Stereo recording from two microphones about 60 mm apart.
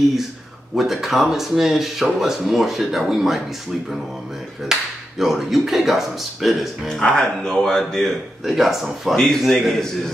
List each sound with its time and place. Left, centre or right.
0.7 s speech: centre
4.7 s speech: centre
6.9 s a man's voice: centre